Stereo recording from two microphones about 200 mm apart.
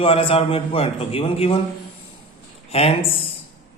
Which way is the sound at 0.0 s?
25° left (ahead or behind).